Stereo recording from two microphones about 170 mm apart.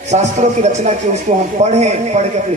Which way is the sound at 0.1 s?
40° right (ahead or behind).